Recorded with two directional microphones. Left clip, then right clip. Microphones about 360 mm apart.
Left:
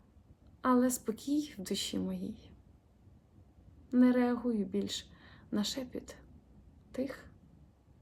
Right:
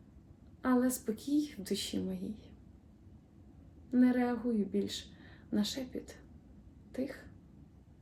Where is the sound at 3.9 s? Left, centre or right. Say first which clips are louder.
Left 2 dB; centre.